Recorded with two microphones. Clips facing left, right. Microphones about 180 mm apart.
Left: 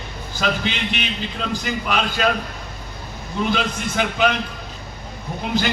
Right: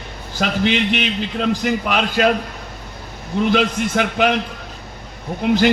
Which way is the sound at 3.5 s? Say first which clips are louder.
Right 5 dB; 65° right (ahead or behind).